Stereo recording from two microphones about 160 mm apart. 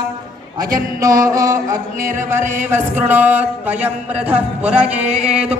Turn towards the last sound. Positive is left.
turn(degrees=-5)  # may be behind; listen again after turning